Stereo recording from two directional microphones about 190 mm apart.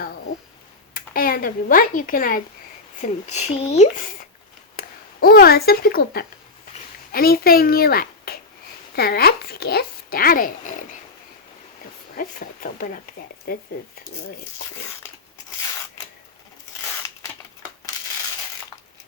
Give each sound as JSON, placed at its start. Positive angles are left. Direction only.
{"t": 0.9, "sound": "speech", "side_deg": 50}
{"t": 3.0, "sound": "speech", "side_deg": 35}
{"t": 4.8, "sound": "a child's voice", "side_deg": 50}
{"t": 12.1, "sound": "speech", "side_deg": 50}